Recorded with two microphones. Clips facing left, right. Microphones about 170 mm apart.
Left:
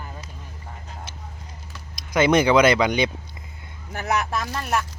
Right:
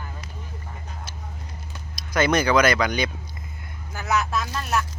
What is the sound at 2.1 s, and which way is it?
Speech, 20° left (ahead or behind).